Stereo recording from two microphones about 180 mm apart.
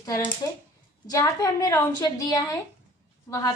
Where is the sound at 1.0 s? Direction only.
20° left (ahead or behind).